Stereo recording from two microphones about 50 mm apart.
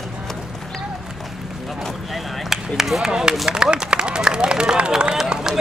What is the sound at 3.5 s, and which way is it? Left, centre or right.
Run, centre.